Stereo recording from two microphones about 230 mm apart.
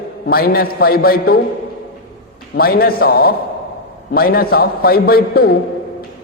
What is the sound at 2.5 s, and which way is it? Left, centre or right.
A man's voice, left.